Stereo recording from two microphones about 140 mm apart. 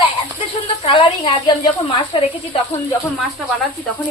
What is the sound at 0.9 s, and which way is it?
A woman's voice, 45° left (ahead or behind).